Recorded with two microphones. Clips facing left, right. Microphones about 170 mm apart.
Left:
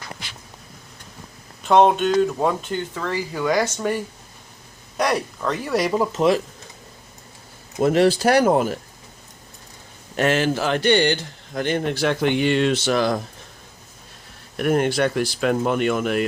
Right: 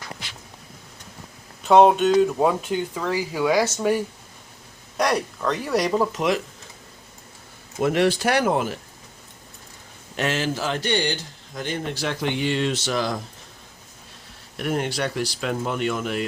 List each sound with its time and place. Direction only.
1.6 s speech: 5° right (ahead or behind)
4.9 s speech: centre (ahead or behind)
6.1 s speech: 30° left (ahead or behind)
7.8 s speech: 35° left (ahead or behind)
10.2 s a man's voice: 55° left (ahead or behind)
14.5 s a man's voice: 55° left (ahead or behind)